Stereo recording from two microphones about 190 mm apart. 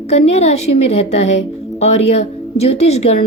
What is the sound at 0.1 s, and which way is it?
A woman's voice, 35° left (ahead or behind).